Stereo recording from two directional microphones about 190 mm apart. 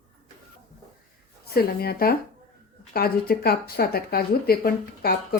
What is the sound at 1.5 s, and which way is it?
Speech, 55° left (ahead or behind).